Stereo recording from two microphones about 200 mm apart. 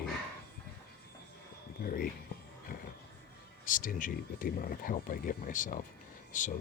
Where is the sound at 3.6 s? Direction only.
40° left (ahead or behind).